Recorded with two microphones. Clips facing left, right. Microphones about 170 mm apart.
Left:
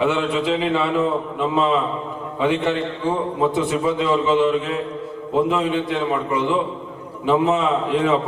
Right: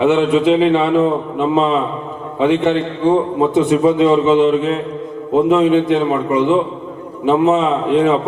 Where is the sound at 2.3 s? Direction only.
20° right (ahead or behind).